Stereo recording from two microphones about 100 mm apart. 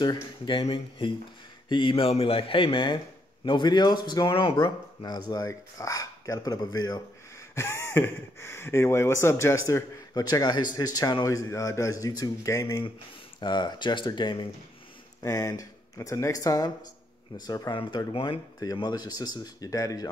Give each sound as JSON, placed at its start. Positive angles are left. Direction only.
{"t": 0.0, "sound": "speech", "side_deg": 45}
{"t": 4.4, "sound": "speech", "side_deg": 55}
{"t": 7.5, "sound": "speech", "side_deg": 25}
{"t": 13.4, "sound": "speech", "side_deg": 50}
{"t": 15.2, "sound": "speech", "side_deg": 35}
{"t": 17.7, "sound": "speech", "side_deg": 55}
{"t": 18.6, "sound": "speech", "side_deg": 40}